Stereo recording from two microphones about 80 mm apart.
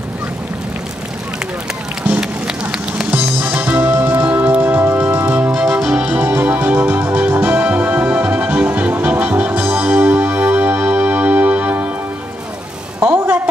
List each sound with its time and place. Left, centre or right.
2.0 s music: centre
3.1 s music: right
5.5 s organ: centre
6.0 s music: centre
13.0 s vehicle: right